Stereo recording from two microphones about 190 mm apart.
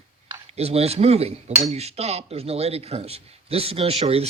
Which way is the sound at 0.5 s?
35° right (ahead or behind).